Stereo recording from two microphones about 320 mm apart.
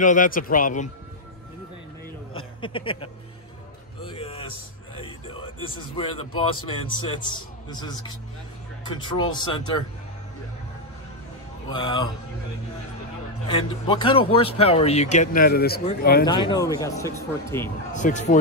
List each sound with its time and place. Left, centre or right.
0.0 s speech: left
2.6 s speech: centre
4.0 s music: centre
4.9 s a sound: centre
7.2 s speech: centre
11.7 s speech: centre
13.5 s speech: centre
16.3 s speech: centre
17.9 s speech: left